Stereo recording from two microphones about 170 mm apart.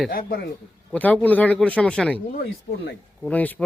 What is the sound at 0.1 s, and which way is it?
Speech, 60° left (ahead or behind).